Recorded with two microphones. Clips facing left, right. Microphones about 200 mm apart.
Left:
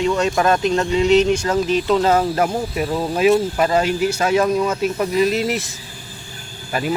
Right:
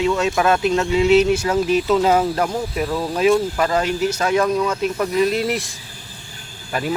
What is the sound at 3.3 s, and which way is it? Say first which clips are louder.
Speech: left 1 dB; 20° left (ahead or behind).